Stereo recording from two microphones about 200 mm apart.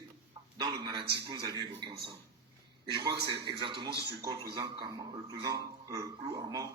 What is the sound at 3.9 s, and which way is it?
Speech, 55° right (ahead or behind).